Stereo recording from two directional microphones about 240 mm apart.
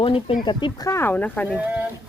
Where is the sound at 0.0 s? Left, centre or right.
Left; by 1.5 s centre.